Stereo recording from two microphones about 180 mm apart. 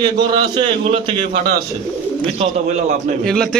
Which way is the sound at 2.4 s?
40° right (ahead or behind).